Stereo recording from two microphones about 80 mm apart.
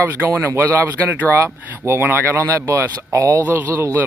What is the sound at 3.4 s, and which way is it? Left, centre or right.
Speech, right.